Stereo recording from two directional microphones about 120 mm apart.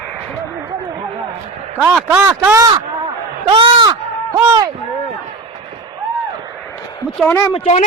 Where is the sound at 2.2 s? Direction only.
20° right (ahead or behind).